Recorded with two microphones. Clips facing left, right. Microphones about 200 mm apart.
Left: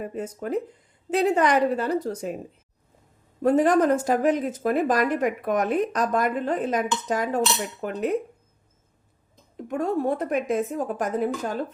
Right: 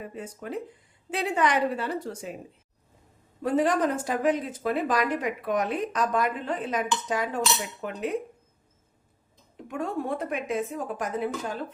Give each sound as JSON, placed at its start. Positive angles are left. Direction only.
{"t": 0.0, "sound": "a woman's voice", "side_deg": 45}
{"t": 3.4, "sound": "speech", "side_deg": 45}
{"t": 9.6, "sound": "speech", "side_deg": 40}